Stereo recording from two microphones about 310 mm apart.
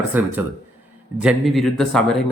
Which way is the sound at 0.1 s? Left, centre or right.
Centre.